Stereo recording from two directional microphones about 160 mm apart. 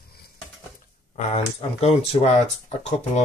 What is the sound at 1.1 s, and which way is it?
Speech, 45° left (ahead or behind).